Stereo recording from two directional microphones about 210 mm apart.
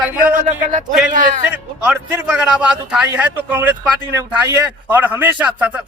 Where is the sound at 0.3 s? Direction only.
35° right (ahead or behind).